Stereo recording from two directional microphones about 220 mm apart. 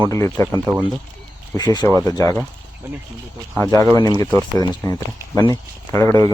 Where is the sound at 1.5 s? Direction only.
20° left (ahead or behind).